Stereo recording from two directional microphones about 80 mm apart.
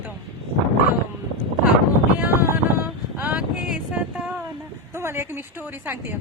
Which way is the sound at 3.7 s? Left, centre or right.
Centre.